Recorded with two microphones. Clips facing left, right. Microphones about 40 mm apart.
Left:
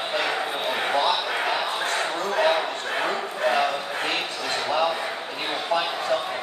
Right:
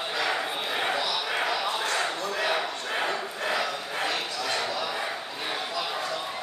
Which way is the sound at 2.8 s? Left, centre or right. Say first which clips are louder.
Left 3 dB; centre.